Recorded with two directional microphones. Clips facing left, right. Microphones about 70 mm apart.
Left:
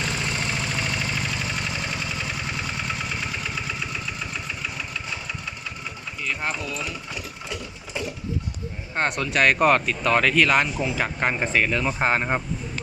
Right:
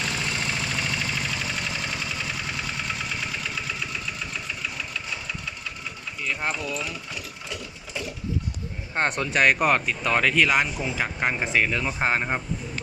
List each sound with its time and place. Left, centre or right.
0.0 s vehicle: centre
6.7 s sewing machine: centre
9.0 s speech: right
9.2 s speech: centre
12.0 s speech: centre